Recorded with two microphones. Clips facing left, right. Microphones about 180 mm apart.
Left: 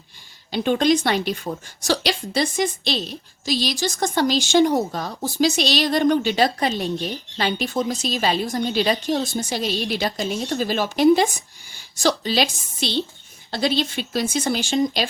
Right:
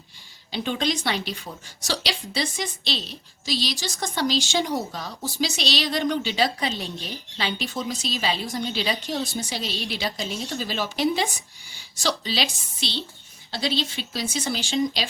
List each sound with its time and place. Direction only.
0.5 s a woman's voice: 50° left (ahead or behind)